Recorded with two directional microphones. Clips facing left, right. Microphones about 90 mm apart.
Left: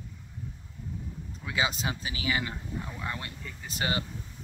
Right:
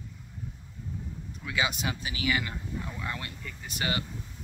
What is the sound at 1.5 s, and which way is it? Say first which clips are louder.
Speech: even; 30° left (ahead or behind).